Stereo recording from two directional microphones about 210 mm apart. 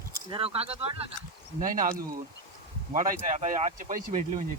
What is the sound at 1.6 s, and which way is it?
Speech, 40° right (ahead or behind).